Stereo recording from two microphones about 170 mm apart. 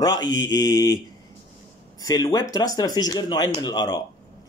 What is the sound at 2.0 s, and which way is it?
Speech, 20° left (ahead or behind).